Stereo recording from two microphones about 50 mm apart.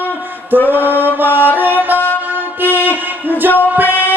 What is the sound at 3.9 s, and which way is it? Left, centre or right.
Music, left.